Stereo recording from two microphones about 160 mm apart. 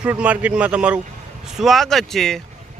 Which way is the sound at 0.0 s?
10° right (ahead or behind).